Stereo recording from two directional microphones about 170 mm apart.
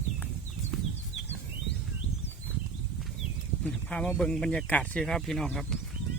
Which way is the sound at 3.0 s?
Centre (ahead or behind).